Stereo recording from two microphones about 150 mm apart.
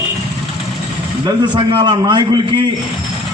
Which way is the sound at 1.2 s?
30° right (ahead or behind).